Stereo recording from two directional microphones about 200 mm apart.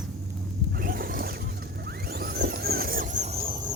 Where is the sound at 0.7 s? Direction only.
50° right (ahead or behind).